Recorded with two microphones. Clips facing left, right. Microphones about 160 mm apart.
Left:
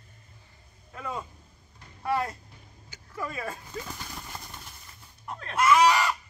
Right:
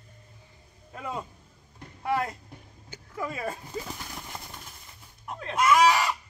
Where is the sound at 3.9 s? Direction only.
10° right (ahead or behind).